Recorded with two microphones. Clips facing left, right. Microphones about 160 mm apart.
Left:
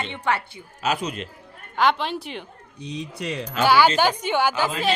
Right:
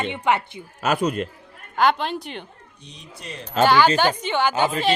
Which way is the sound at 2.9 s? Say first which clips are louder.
Left 9 dB; 80° left.